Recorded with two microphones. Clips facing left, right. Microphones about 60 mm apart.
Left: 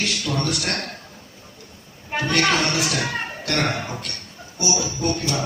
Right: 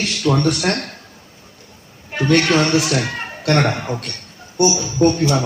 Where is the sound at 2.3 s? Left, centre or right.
Right.